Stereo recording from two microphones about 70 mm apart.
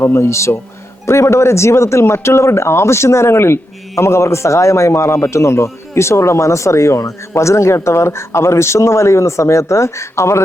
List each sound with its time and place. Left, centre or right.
0.0 s speech: left